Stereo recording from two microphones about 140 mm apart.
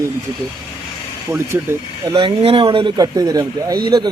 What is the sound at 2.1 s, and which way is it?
Speech, 40° right (ahead or behind).